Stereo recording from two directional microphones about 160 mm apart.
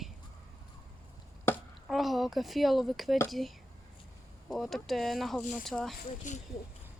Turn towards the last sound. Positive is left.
turn(degrees=55)  # may be behind; listen again after turning